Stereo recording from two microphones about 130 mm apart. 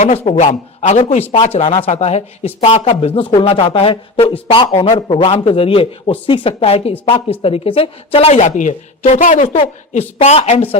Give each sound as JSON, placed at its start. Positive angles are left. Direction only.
{"t": 0.3, "sound": "speech", "side_deg": 60}
{"t": 9.6, "sound": "speech", "side_deg": 50}